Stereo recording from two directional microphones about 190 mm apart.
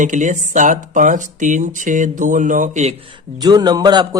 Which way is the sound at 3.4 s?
20° right (ahead or behind).